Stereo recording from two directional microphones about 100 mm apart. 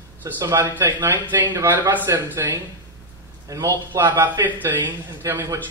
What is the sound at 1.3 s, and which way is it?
Speech, 20° right (ahead or behind).